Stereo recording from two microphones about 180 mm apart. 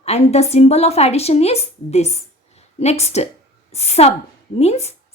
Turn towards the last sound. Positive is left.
turn(degrees=35)  # may be behind; listen again after turning